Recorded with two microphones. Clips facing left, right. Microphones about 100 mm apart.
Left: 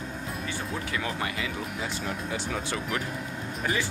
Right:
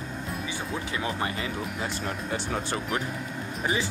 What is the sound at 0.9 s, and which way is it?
Speech, 25° right (ahead or behind).